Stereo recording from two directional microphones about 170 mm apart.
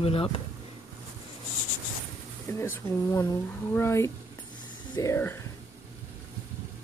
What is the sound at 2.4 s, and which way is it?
Speech, 15° left (ahead or behind).